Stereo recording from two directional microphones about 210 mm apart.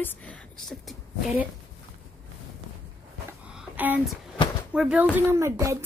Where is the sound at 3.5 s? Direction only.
5° right (ahead or behind).